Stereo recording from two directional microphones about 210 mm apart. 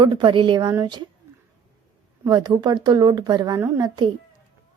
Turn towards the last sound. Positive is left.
turn(degrees=-20)  # may be behind; listen again after turning